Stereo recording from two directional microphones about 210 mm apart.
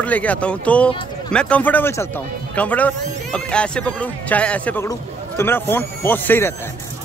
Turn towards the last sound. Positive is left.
turn(degrees=10)  # may be behind; listen again after turning